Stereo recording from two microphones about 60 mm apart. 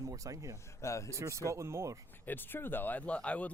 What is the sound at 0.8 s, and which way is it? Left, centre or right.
Speech, left.